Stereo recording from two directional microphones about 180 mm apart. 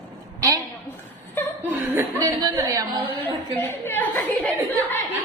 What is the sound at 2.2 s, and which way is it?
Speech, 20° right (ahead or behind).